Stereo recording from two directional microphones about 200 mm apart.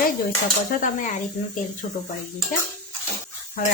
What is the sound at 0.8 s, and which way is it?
Speech, 40° left (ahead or behind).